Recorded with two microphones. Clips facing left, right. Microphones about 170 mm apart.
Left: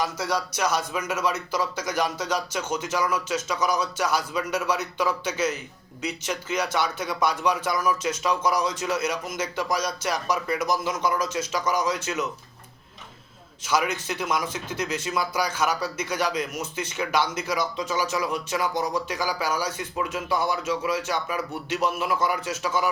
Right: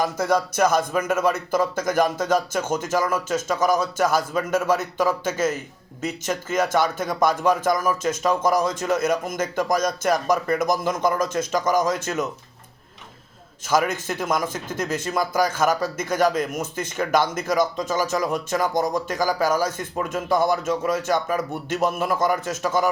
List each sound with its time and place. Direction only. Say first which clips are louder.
0.0 s speech: right 5 dB; 50° right (ahead or behind)
13.7 s speech: right 4 dB; 50° right (ahead or behind)